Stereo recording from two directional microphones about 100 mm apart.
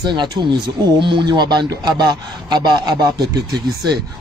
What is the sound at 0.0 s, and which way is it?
Speech, 50° right (ahead or behind).